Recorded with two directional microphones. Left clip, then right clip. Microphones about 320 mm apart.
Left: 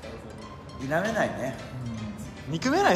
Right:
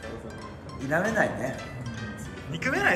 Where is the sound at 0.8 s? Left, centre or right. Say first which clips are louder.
Right 1 dB; centre.